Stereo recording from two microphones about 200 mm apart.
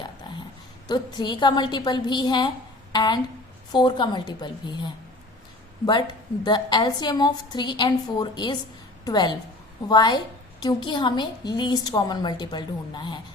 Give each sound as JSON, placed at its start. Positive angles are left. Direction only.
{"t": 0.9, "sound": "a woman's voice", "side_deg": 20}